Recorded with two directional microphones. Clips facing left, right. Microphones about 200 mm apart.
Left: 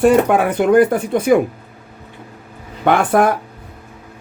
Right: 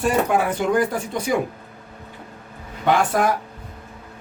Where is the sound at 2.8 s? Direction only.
60° left (ahead or behind).